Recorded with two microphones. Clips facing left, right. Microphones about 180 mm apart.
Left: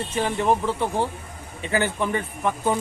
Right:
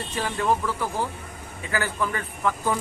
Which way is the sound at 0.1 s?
20° left (ahead or behind).